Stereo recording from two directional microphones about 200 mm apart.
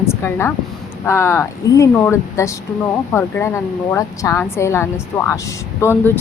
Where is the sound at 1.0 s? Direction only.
15° left (ahead or behind).